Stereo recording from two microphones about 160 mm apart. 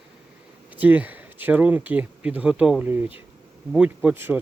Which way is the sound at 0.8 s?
10° right (ahead or behind).